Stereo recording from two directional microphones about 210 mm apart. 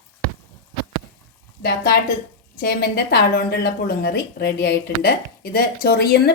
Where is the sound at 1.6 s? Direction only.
50° left (ahead or behind).